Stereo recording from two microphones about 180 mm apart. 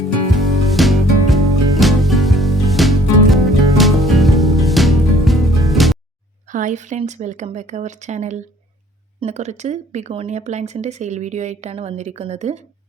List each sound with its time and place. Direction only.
0.3 s music: centre (ahead or behind)
6.5 s speech: 45° right (ahead or behind)